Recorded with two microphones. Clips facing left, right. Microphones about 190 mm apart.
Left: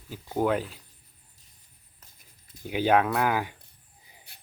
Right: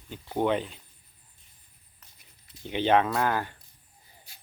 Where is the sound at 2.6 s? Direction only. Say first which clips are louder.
Even; 5° left (ahead or behind).